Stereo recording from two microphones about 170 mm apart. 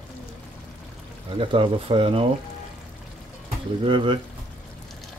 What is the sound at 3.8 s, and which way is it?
Speech, 30° right (ahead or behind).